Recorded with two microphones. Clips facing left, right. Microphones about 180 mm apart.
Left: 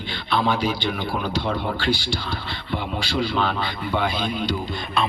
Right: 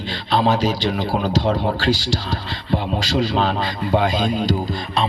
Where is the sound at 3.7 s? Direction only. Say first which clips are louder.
Right 5 dB; 40° right (ahead or behind).